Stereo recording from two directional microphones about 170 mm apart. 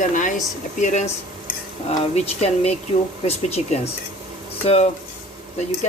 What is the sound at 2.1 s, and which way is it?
Speech, 40° left (ahead or behind).